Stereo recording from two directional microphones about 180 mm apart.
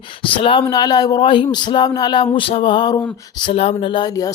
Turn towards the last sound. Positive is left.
turn(degrees=25)  # may be behind; listen again after turning